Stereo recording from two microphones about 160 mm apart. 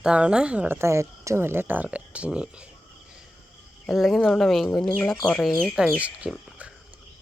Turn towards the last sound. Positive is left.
turn(degrees=-10)  # may be behind; listen again after turning